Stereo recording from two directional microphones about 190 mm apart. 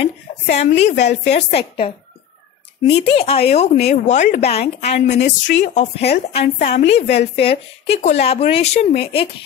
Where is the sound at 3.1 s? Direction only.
30° left (ahead or behind).